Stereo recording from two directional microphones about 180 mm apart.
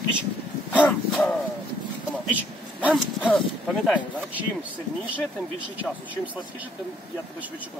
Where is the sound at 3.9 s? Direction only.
10° right (ahead or behind).